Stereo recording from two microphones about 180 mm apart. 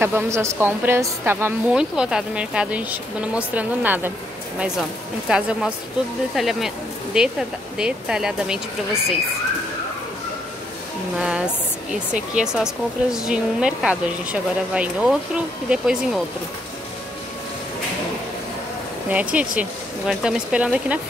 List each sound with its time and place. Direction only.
0.0 s a woman's voice: 15° right (ahead or behind)
11.1 s speech: 5° right (ahead or behind)
19.0 s speech: 10° right (ahead or behind)